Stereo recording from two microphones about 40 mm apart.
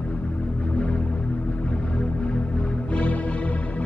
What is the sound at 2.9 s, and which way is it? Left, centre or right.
Music, left.